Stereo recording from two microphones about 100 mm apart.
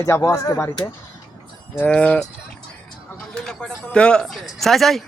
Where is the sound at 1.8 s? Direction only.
10° left (ahead or behind).